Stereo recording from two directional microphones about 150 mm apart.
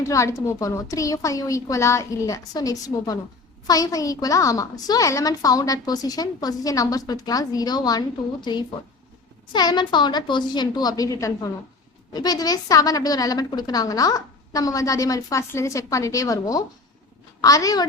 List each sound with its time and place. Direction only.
0.0 s a woman's voice: 20° left (ahead or behind)